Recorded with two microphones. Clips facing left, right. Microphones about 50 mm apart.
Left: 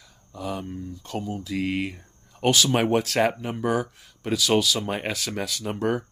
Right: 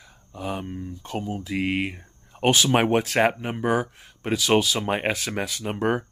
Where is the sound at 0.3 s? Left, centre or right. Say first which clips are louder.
Right 1 dB; right.